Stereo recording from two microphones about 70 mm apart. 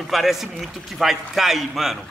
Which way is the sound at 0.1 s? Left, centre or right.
Centre.